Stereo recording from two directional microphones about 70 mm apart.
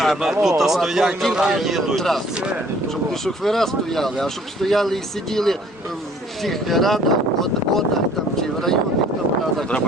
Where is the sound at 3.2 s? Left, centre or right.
Centre.